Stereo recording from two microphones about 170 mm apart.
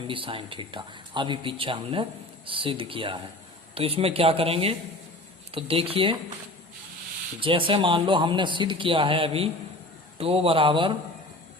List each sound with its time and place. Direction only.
0.1 s speech: 30° right (ahead or behind)
7.3 s speech: 30° right (ahead or behind)